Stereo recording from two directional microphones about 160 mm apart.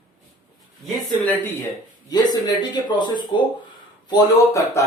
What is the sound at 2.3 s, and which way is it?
Speech, 25° left (ahead or behind).